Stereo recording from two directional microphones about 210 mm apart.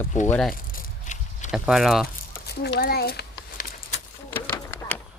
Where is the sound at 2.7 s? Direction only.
50° left (ahead or behind).